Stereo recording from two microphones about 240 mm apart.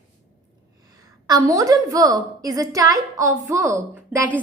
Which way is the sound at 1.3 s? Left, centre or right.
Centre.